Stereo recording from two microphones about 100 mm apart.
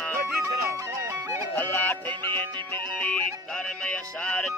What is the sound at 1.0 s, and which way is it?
Music, 30° right (ahead or behind).